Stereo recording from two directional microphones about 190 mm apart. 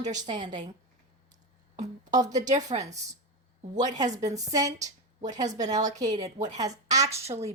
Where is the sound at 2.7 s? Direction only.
35° right (ahead or behind).